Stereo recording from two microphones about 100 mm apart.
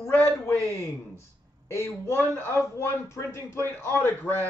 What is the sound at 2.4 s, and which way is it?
A man's voice, 25° left (ahead or behind).